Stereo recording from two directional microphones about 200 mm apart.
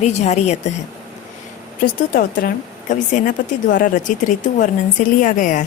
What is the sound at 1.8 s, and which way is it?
Speech, 45° left (ahead or behind).